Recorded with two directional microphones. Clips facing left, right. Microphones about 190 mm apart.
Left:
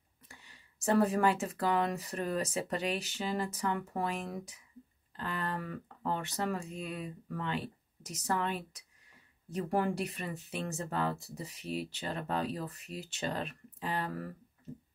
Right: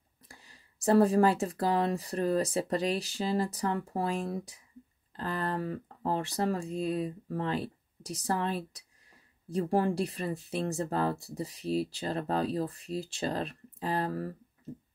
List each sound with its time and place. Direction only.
0.3 s speech: 35° right (ahead or behind)